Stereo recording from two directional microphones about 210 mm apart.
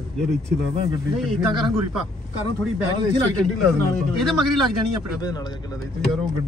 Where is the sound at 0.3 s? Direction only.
30° right (ahead or behind).